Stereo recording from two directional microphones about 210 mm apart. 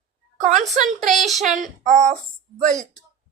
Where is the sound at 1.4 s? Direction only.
35° right (ahead or behind).